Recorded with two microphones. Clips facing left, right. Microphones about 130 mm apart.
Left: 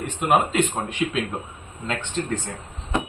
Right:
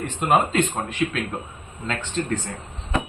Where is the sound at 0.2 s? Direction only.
5° left (ahead or behind).